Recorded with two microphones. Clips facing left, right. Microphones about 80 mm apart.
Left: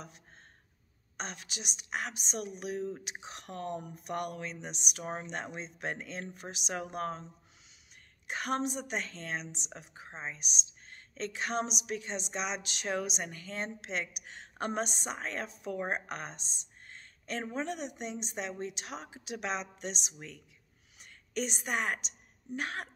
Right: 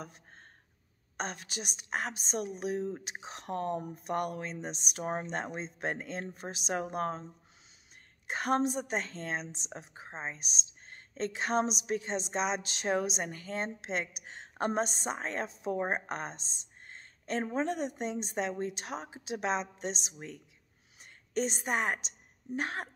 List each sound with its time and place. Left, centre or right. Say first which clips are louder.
1.1 s a woman's voice: right 4 dB; right
8.3 s a woman's voice: right 4 dB; right